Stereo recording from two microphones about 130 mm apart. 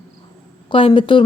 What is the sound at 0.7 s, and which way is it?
Speech, 40° left (ahead or behind).